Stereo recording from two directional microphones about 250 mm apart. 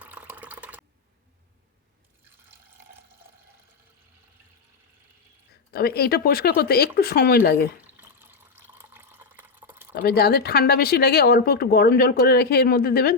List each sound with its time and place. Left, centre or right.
0.0 s water: centre
5.7 s speech: left
7.9 s water: centre
9.9 s speech: left